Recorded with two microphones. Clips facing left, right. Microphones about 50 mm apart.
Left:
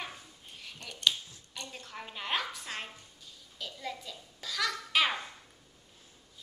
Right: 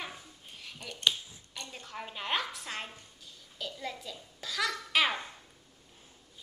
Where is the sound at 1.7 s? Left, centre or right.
Centre.